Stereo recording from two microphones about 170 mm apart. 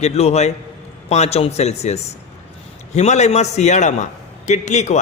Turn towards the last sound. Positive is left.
turn(degrees=45)  # may be behind; listen again after turning